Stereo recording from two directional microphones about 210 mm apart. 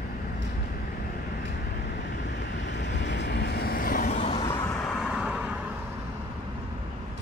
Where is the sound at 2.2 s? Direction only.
55° left (ahead or behind); by 4.4 s 35° left (ahead or behind).